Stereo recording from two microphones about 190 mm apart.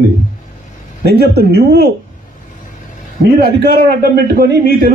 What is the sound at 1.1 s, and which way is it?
Speech, 60° right (ahead or behind).